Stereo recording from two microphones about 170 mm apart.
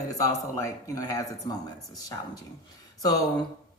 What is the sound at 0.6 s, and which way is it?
Speech, 20° left (ahead or behind).